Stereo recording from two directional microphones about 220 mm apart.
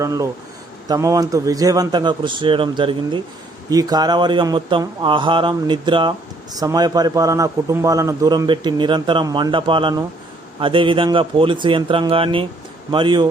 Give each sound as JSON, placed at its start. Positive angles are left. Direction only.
{"t": 0.0, "sound": "speech", "side_deg": -15}